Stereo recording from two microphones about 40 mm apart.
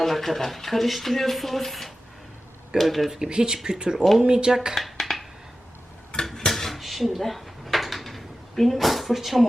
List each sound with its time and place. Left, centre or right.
0.0 s speech: centre
3.1 s speech: right
4.7 s a sound: centre
6.3 s dishes: centre